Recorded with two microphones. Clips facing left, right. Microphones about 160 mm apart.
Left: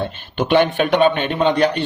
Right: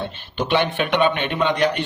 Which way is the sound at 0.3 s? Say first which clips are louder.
Left 5 dB; 50° left (ahead or behind).